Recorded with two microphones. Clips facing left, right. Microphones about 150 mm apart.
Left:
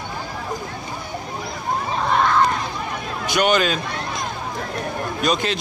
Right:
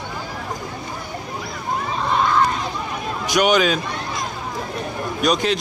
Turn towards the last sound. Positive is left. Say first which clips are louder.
# right 2 dB
turn(degrees=0)  # may be behind; listen again after turning